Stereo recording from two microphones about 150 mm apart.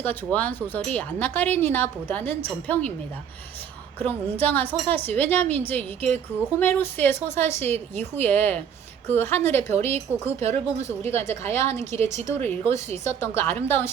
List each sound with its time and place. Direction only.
0.0 s a woman's voice: 10° left (ahead or behind)
4.0 s a woman's voice: 10° left (ahead or behind)